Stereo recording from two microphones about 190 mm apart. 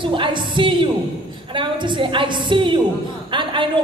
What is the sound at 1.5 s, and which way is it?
A woman's voice, 25° right (ahead or behind).